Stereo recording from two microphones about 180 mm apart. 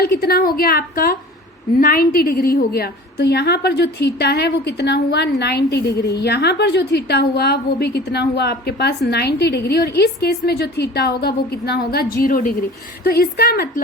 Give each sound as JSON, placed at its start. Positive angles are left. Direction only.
{"t": 0.0, "sound": "a woman's voice", "side_deg": 60}